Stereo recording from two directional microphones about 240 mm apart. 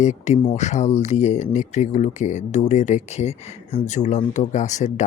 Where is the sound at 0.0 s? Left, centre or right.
Left.